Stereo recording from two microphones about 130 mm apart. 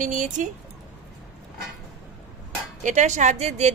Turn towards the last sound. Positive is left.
turn(degrees=-65)  # may be behind; listen again after turning